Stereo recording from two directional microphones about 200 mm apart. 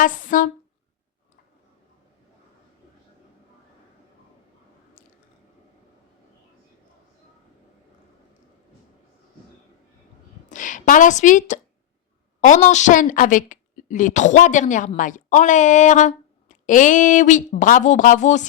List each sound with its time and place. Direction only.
0.0 s speech: 40° left (ahead or behind)
10.5 s speech: 40° left (ahead or behind)